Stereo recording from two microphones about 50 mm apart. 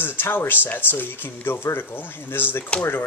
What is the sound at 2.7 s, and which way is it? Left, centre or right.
Speech, left.